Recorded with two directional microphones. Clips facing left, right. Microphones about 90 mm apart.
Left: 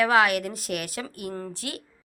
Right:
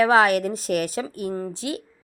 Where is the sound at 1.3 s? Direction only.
20° right (ahead or behind).